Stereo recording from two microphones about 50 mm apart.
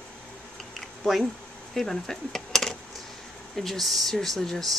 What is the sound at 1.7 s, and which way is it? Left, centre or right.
Speech, centre.